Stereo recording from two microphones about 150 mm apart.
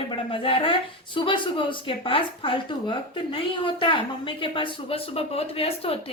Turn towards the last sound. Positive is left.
turn(degrees=40)  # may be behind; listen again after turning